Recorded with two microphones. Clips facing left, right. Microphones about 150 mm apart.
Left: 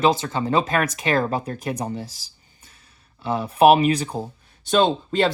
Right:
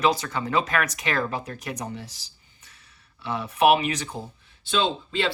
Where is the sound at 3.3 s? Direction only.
30° left (ahead or behind).